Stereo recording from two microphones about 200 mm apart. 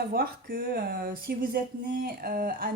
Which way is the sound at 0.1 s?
45° right (ahead or behind).